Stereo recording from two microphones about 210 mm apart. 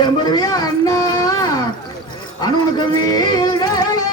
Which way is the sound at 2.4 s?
20° left (ahead or behind).